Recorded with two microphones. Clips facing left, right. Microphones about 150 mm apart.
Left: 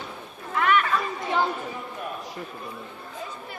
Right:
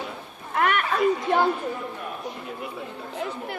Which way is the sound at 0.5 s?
55° right (ahead or behind).